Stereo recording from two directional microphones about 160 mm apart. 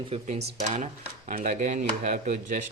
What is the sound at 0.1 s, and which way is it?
Speech, 40° right (ahead or behind).